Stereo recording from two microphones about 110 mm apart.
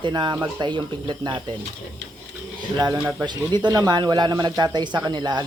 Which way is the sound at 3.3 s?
40° right (ahead or behind).